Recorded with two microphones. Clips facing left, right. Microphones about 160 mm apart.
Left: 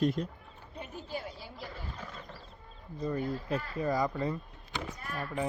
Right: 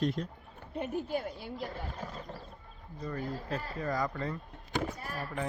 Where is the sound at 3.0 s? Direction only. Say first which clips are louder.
Left 4 dB; 20° left (ahead or behind).